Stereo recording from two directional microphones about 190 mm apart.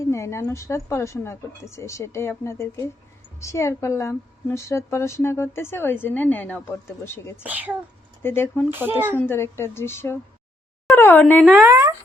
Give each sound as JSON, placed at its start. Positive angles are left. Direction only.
{"t": 0.0, "sound": "speech", "side_deg": 15}
{"t": 7.4, "sound": "speech", "side_deg": -10}
{"t": 8.2, "sound": "speech", "side_deg": 10}
{"t": 8.7, "sound": "speech", "side_deg": -10}
{"t": 9.1, "sound": "speech", "side_deg": 10}
{"t": 11.6, "sound": "speech", "side_deg": -20}